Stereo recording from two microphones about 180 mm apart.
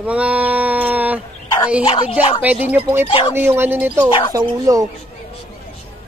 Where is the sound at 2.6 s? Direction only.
10° right (ahead or behind).